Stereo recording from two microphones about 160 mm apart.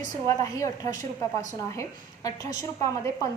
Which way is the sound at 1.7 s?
20° left (ahead or behind).